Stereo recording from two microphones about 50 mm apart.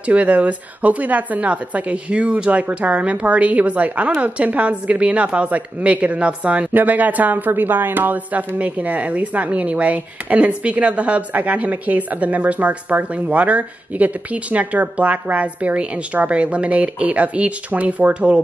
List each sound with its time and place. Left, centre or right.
0.0 s speech: right